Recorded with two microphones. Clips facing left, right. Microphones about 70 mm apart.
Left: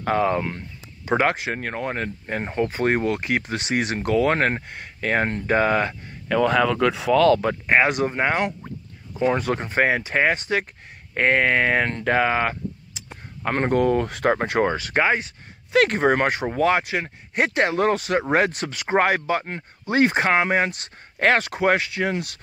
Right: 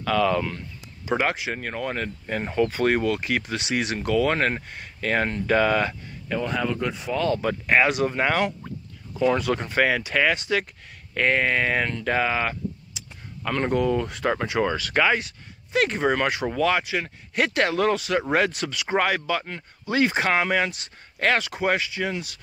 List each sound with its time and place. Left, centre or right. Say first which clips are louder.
0.0 s speech: left 1 dB; left
1.0 s speech: left 3 dB; left
6.2 s speech: left 7 dB; left
7.6 s speech: right 1 dB; left
14.7 s speech: left 1 dB; left
15.7 s speech: left 4 dB; left